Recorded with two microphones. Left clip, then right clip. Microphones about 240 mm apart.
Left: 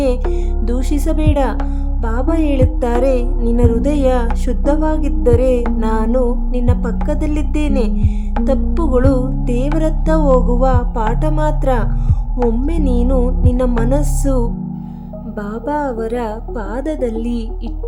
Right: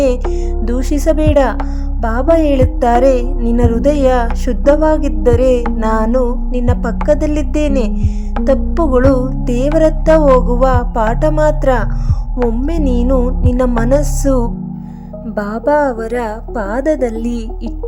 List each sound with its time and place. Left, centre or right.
0.0 s speech: centre
2.0 s music: centre
15.4 s a woman's voice: right